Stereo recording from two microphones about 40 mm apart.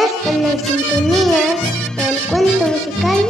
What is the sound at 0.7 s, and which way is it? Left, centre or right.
Music, centre.